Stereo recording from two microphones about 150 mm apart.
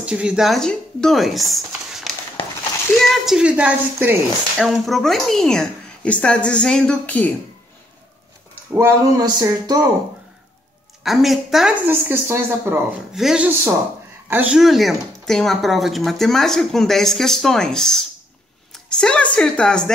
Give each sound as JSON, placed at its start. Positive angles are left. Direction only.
{"t": 0.0, "sound": "speech", "side_deg": -5}
{"t": 1.7, "sound": "a sound", "side_deg": -5}
{"t": 3.0, "sound": "a woman's voice", "side_deg": -5}
{"t": 8.7, "sound": "speech", "side_deg": -25}
{"t": 11.1, "sound": "speech", "side_deg": 0}
{"t": 11.8, "sound": "a woman's voice", "side_deg": -15}
{"t": 13.1, "sound": "a woman's voice", "side_deg": -5}